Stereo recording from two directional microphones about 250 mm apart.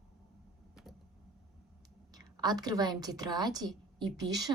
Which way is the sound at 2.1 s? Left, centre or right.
Centre.